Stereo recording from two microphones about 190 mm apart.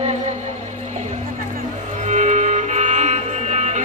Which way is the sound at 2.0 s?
40° right (ahead or behind).